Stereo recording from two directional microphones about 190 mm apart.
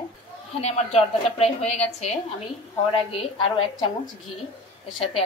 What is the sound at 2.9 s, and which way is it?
Speech, 30° left (ahead or behind).